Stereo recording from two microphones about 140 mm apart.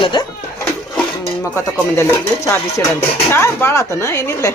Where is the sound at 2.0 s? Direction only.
20° left (ahead or behind).